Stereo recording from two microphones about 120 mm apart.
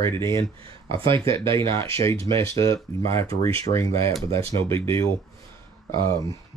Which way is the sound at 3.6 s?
20° left (ahead or behind).